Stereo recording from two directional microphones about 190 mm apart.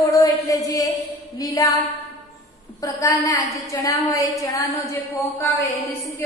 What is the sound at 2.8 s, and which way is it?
A woman's voice, 15° left (ahead or behind).